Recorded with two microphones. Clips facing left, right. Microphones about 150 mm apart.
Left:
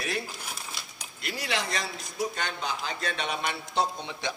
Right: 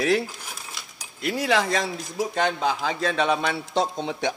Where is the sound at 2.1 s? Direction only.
90° right.